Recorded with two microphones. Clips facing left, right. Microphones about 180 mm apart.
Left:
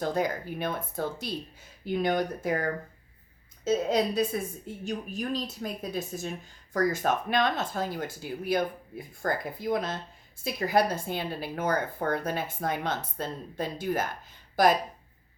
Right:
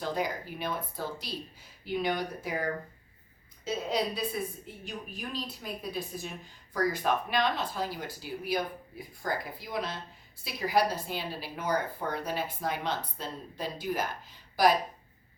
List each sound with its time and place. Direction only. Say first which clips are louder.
0.0 s speech: left 4 dB; 45° left (ahead or behind)